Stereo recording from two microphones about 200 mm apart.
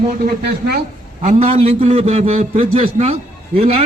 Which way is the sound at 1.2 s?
30° right (ahead or behind).